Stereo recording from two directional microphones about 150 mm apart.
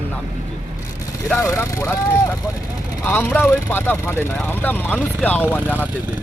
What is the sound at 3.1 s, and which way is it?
Speech, 15° left (ahead or behind).